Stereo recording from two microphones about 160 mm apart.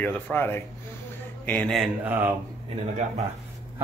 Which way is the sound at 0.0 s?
10° left (ahead or behind).